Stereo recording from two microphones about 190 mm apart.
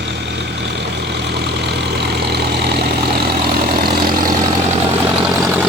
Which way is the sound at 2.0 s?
60° right (ahead or behind).